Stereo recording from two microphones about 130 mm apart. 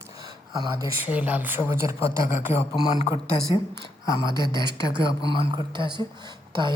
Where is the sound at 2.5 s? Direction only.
45° left (ahead or behind).